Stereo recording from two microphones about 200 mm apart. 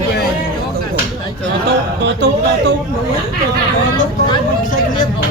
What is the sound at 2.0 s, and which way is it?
Speech, 60° right (ahead or behind).